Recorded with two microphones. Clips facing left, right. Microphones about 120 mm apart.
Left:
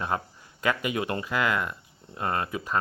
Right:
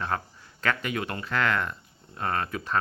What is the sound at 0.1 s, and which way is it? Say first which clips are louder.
Speech: left 1 dB; 20° left (ahead or behind).